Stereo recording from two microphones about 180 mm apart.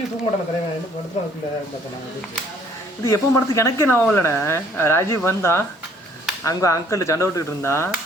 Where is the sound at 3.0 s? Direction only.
15° left (ahead or behind).